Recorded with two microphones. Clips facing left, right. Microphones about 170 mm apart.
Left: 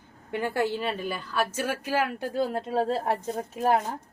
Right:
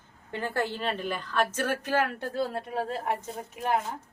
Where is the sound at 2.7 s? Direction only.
30° left (ahead or behind).